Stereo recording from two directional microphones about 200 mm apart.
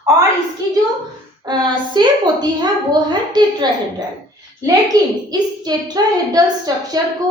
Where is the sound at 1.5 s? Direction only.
20° right (ahead or behind).